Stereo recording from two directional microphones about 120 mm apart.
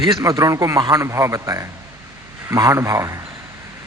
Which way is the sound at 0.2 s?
30° right (ahead or behind).